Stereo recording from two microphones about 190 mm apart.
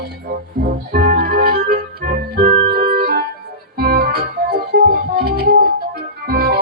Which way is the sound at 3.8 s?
55° right (ahead or behind).